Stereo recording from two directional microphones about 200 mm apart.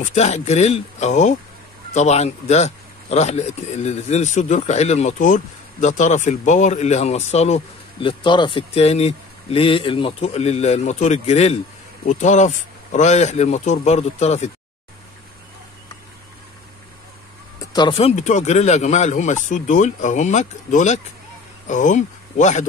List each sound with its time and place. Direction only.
0.0 s a man's voice: 35° left (ahead or behind)
17.6 s a man's voice: 20° left (ahead or behind)